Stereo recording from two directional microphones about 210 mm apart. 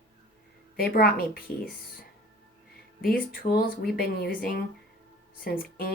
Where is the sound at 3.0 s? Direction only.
45° left (ahead or behind).